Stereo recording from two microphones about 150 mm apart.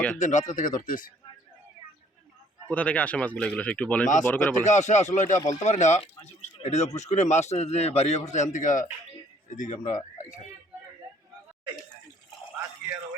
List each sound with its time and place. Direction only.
0.2 s speech: 55° left (ahead or behind)
2.6 s speech: 10° left (ahead or behind)
4.6 s speech: 50° left (ahead or behind)